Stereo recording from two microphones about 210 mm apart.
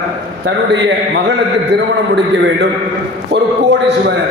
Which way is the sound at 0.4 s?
55° right (ahead or behind).